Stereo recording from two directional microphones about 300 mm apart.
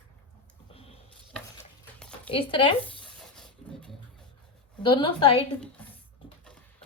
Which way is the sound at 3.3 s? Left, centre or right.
Centre.